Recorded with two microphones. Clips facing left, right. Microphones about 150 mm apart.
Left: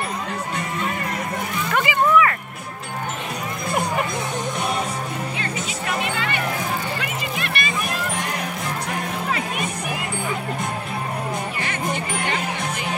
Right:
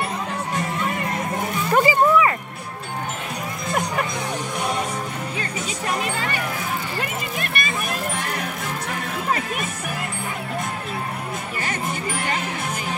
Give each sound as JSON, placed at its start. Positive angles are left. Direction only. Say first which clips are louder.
{"t": 1.7, "sound": "music", "louder": "right 3 dB", "side_deg": -35}
{"t": 5.9, "sound": "music", "louder": "even", "side_deg": -40}